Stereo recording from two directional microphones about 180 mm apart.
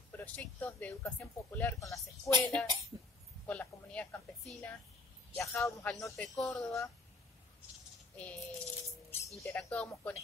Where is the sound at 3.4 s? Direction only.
10° left (ahead or behind).